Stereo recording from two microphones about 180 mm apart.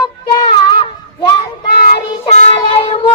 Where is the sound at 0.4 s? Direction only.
25° left (ahead or behind).